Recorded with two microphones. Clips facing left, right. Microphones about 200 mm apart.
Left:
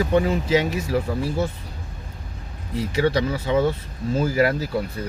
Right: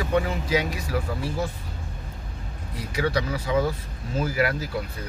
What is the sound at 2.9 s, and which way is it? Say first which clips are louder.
Speech: left 4 dB; 30° left (ahead or behind).